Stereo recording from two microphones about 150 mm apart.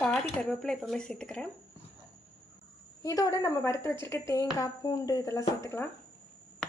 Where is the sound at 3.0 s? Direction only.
20° left (ahead or behind).